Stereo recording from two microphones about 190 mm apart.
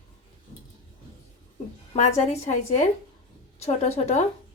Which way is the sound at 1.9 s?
40° left (ahead or behind).